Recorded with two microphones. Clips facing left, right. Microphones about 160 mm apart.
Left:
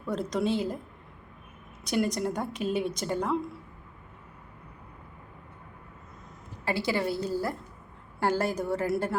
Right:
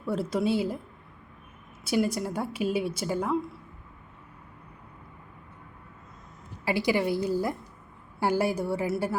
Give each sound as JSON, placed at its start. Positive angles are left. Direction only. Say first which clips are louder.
{"t": 0.0, "sound": "a woman's voice", "louder": "right 1 dB", "side_deg": -5}
{"t": 1.8, "sound": "a woman's voice", "louder": "right 1 dB", "side_deg": -5}
{"t": 6.7, "sound": "a woman's voice", "louder": "right 3 dB", "side_deg": -15}